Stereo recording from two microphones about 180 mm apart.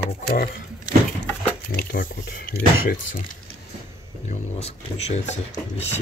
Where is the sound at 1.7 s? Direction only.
55° left (ahead or behind).